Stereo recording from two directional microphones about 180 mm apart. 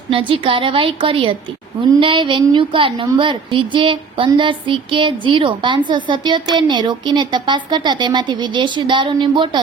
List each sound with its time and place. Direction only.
0.1 s a woman's voice: 30° right (ahead or behind)